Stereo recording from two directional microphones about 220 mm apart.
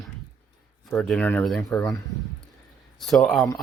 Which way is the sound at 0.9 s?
Centre (ahead or behind).